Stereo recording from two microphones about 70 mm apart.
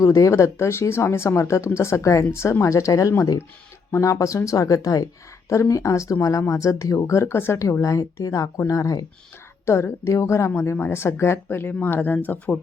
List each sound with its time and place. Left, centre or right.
0.0 s speech: left
7.6 s speech: left
9.6 s a woman's voice: left